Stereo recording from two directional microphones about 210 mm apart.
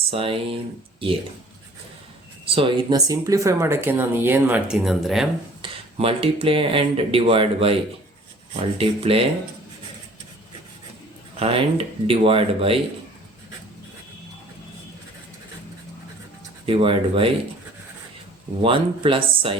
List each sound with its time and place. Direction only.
0.1 s speech: 25° right (ahead or behind)
2.5 s speech: 25° right (ahead or behind); by 5.3 s centre (ahead or behind)
5.6 s speech: 25° right (ahead or behind)
11.3 s speech: 30° right (ahead or behind)
16.6 s speech: 25° right (ahead or behind)
18.6 s speech: 25° right (ahead or behind)